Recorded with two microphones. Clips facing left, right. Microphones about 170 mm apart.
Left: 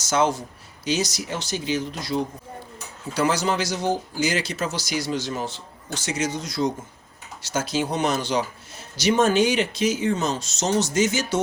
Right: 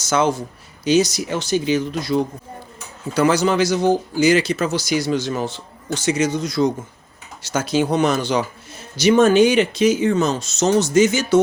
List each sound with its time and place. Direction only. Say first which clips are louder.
0.0 s a man's voice: right 3 dB; 60° right (ahead or behind)